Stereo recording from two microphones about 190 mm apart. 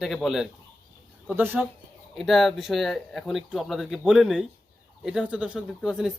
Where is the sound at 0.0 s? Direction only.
Centre (ahead or behind).